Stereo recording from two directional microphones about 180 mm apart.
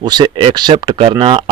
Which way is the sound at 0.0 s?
25° right (ahead or behind).